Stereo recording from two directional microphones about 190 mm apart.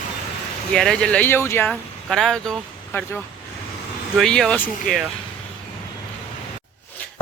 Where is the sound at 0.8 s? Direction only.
5° left (ahead or behind).